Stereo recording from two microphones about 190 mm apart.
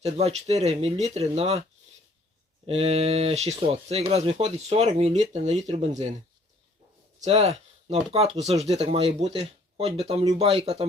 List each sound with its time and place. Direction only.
0.0 s speech: 35° right (ahead or behind)
2.6 s speech: 35° right (ahead or behind)
7.2 s speech: 35° right (ahead or behind)